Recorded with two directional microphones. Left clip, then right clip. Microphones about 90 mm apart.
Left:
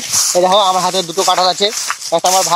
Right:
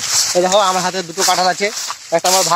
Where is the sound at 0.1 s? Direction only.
40° left (ahead or behind).